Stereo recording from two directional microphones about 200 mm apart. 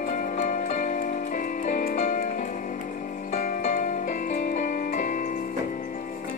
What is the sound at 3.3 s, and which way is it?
Music, 35° left (ahead or behind).